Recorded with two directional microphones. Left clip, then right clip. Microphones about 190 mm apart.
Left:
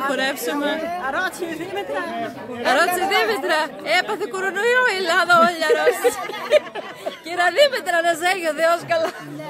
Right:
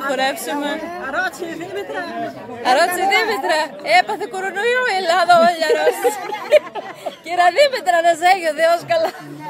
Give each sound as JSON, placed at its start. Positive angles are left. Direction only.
{"t": 0.1, "sound": "speech", "side_deg": 0}
{"t": 0.7, "sound": "a woman's voice", "side_deg": 20}
{"t": 2.6, "sound": "speech", "side_deg": -5}